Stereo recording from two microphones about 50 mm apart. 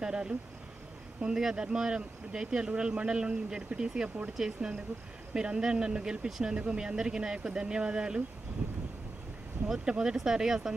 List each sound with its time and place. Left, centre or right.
0.0 s speech: centre
9.8 s speech: centre